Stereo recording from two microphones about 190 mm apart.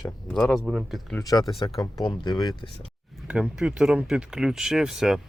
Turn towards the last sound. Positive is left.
turn(degrees=-5)  # may be behind; listen again after turning